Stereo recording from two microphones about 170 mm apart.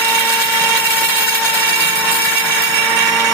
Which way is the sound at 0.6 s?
10° left (ahead or behind).